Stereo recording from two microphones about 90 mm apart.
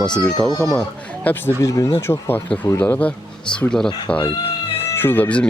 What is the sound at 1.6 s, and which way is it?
Speech, 40° left (ahead or behind).